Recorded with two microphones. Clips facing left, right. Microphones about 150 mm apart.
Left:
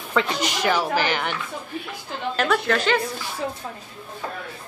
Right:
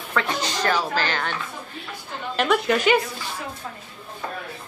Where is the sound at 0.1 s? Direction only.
15° left (ahead or behind).